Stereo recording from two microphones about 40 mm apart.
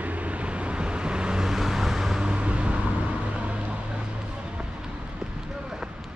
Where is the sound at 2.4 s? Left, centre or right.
Right.